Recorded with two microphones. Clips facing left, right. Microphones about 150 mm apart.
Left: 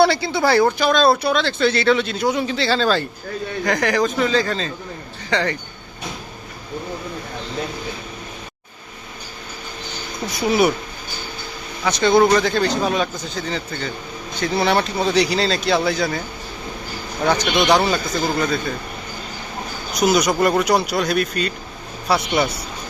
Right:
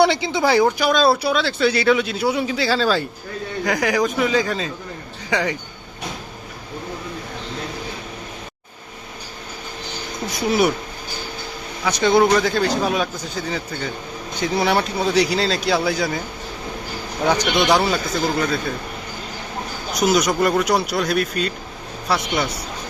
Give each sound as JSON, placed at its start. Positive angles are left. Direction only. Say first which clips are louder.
{"t": 0.0, "sound": "a man's voice", "louder": "left 1 dB", "side_deg": -20}
{"t": 10.4, "sound": "speech", "louder": "left 1 dB", "side_deg": 0}
{"t": 11.9, "sound": "a man's voice", "louder": "left 1 dB", "side_deg": -10}
{"t": 17.2, "sound": "a man's voice", "louder": "left 1 dB", "side_deg": -10}
{"t": 19.9, "sound": "speech", "louder": "left 1 dB", "side_deg": 0}